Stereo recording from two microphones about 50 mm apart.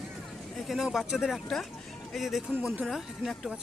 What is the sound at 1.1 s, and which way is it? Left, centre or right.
Speech, centre.